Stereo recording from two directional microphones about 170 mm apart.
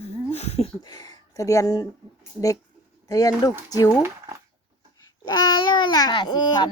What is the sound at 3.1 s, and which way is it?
Speech, 20° left (ahead or behind).